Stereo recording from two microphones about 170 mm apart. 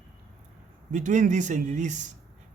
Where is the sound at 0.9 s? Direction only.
45° right (ahead or behind).